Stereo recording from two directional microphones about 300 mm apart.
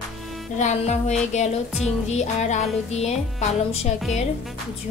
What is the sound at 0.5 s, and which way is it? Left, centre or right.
Music, left.